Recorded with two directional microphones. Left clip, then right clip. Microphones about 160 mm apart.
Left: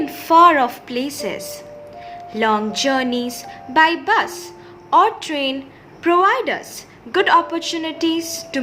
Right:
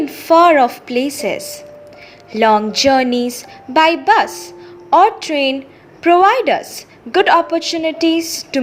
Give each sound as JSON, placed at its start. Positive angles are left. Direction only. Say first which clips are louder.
{"t": 0.0, "sound": "a woman's voice", "louder": "right 1 dB", "side_deg": -25}